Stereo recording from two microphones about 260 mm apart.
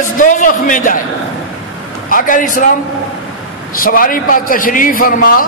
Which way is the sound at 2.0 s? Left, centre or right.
Left.